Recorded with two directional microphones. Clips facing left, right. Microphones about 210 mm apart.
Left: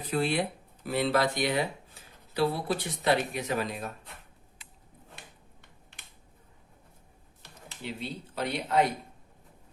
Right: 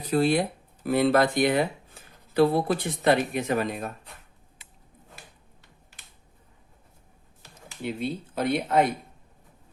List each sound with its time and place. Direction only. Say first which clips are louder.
0.1 s speech: right 6 dB; 40° right (ahead or behind)
0.9 s speech: right 6 dB; 50° right (ahead or behind)
7.9 s speech: right 7 dB; 50° right (ahead or behind)